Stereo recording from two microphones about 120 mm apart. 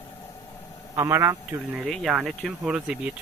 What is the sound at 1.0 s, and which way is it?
Speech, 25° right (ahead or behind).